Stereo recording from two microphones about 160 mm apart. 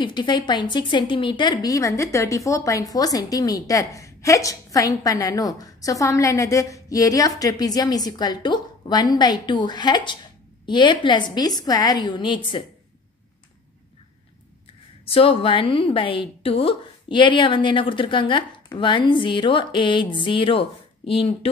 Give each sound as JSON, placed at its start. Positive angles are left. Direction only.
{"t": 0.0, "sound": "a woman's voice", "side_deg": 30}
{"t": 15.0, "sound": "a woman's voice", "side_deg": 35}